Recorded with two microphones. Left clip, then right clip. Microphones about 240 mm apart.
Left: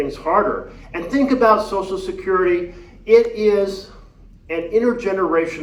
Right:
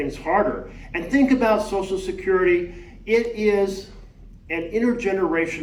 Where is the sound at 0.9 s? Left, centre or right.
Left.